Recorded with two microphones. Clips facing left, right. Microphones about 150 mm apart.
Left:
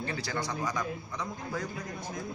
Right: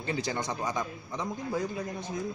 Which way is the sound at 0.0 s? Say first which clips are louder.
Right 2 dB; 20° right (ahead or behind).